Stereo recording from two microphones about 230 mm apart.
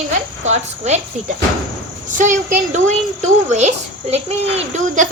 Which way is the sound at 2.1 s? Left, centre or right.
Right.